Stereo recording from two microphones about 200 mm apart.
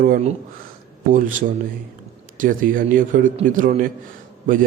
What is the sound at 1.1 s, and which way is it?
A man's voice, 40° right (ahead or behind).